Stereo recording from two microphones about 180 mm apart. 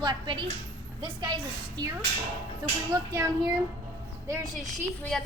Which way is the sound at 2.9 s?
20° right (ahead or behind).